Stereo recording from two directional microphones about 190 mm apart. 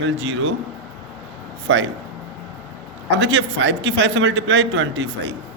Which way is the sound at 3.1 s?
75° right (ahead or behind).